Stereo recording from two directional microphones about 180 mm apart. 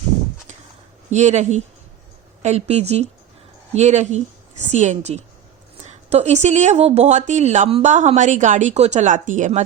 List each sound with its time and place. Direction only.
1.1 s speech: 40° right (ahead or behind)